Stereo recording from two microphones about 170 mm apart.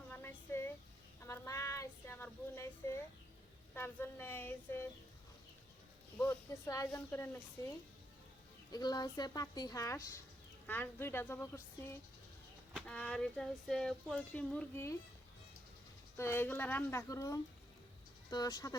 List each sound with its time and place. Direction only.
0.1 s a sound: 15° left (ahead or behind)
1.2 s child singing: 15° left (ahead or behind)
3.8 s a woman's voice: 15° left (ahead or behind)
6.1 s a woman's voice: 20° left (ahead or behind)
16.1 s a woman's voice: 15° left (ahead or behind)